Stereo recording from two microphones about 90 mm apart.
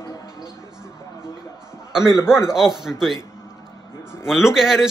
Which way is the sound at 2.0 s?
50° right (ahead or behind).